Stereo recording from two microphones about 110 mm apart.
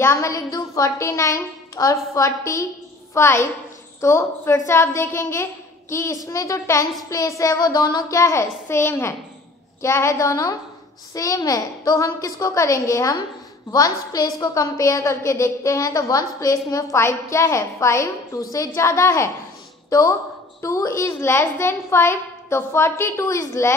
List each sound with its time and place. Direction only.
0.0 s a woman's voice: 25° left (ahead or behind)